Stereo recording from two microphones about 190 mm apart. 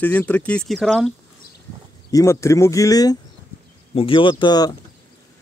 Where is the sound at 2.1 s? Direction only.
15° left (ahead or behind).